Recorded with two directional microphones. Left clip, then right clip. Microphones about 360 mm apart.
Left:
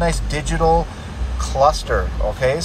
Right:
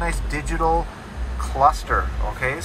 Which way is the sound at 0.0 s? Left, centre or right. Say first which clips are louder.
Left 5 dB; centre.